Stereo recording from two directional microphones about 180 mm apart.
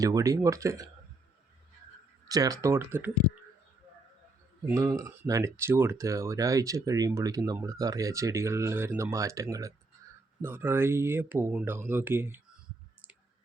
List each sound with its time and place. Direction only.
0.0 s speech: 20° right (ahead or behind)
2.3 s speech: 20° right (ahead or behind)
4.7 s speech: 15° right (ahead or behind)